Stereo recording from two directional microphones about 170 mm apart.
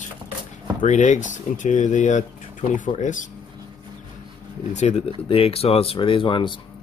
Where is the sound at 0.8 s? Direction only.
45° left (ahead or behind).